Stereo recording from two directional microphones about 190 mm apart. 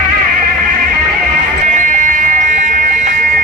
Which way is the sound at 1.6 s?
40° right (ahead or behind).